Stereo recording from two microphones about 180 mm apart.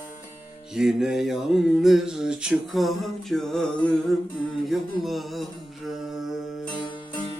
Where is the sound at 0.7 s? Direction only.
Centre (ahead or behind).